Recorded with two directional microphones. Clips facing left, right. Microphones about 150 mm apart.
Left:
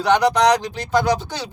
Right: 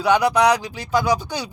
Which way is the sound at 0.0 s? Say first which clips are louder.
Left 1 dB; 10° right (ahead or behind).